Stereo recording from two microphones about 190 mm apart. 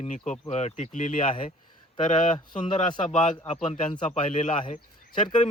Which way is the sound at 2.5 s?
25° left (ahead or behind).